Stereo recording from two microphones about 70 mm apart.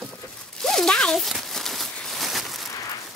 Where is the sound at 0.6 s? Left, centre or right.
Centre.